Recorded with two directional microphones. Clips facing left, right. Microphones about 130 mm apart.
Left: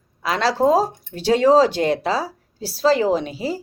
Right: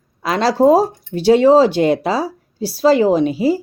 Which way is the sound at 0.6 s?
10° right (ahead or behind).